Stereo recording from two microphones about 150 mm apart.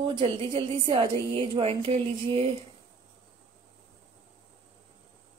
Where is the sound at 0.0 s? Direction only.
30° right (ahead or behind).